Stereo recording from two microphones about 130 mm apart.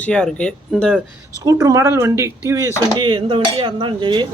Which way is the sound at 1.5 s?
25° right (ahead or behind).